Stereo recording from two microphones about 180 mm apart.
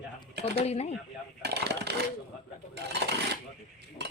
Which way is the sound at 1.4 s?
65° right (ahead or behind).